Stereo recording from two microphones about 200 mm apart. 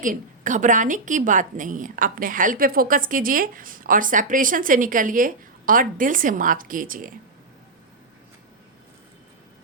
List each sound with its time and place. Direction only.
0.0 s a woman's voice: 40° right (ahead or behind)